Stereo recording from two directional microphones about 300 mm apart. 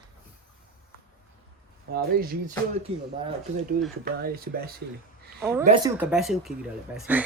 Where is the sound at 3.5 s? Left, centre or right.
Right.